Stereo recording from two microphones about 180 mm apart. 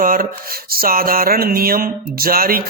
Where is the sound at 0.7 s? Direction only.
55° right (ahead or behind).